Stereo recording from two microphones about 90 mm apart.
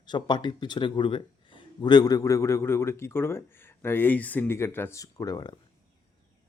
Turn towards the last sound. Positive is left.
turn(degrees=45)  # may be behind; listen again after turning